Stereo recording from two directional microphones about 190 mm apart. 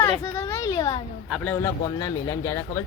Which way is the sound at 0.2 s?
15° left (ahead or behind).